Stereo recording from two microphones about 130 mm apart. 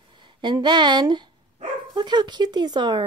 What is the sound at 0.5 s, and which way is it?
Speech, 35° right (ahead or behind).